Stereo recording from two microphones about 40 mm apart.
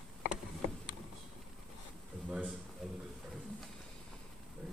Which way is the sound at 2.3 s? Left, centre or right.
Right.